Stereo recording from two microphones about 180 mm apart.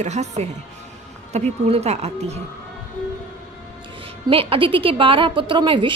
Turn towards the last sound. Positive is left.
turn(degrees=-25)  # may be behind; listen again after turning